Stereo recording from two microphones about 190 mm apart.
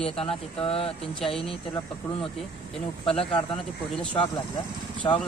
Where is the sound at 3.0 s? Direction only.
30° left (ahead or behind).